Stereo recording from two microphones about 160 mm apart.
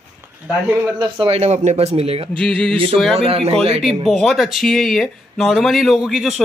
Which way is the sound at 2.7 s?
35° right (ahead or behind).